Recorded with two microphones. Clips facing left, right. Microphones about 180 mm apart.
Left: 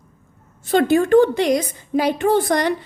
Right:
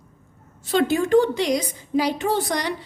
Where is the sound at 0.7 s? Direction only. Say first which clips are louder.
Left 4 dB; 55° left (ahead or behind).